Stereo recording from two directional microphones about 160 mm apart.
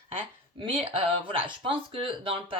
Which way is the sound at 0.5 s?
30° right (ahead or behind).